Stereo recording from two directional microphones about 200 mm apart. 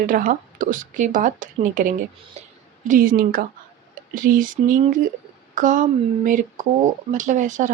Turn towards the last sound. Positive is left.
turn(degrees=-40)  # may be behind; listen again after turning